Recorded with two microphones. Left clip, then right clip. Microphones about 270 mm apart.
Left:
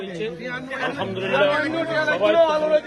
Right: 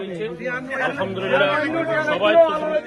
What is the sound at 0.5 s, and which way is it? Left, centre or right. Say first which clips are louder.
Speech: right 5 dB; left.